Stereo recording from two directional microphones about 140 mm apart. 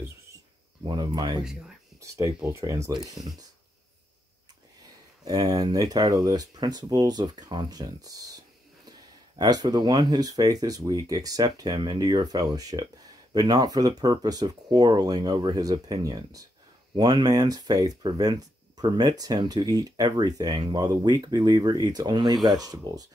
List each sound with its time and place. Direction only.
0.8 s speech: 30° right (ahead or behind)
1.4 s speech: 5° right (ahead or behind)
2.0 s speech: 20° right (ahead or behind)
5.2 s speech: 25° right (ahead or behind)
9.4 s speech: 25° right (ahead or behind)